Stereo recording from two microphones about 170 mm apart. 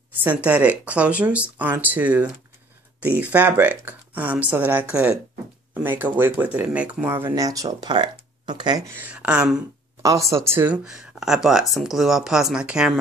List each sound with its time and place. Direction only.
0.1 s speech: 10° right (ahead or behind)
8.9 s speech: 10° right (ahead or behind)
10.0 s speech: 20° right (ahead or behind)